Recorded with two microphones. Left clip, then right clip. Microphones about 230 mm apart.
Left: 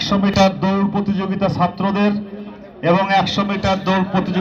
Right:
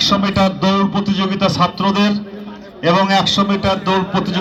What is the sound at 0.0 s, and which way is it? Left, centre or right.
Music, right.